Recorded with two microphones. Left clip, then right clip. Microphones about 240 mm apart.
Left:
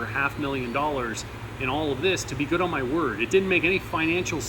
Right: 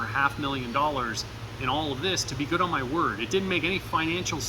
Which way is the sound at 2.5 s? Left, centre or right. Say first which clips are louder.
Left 1 dB; centre.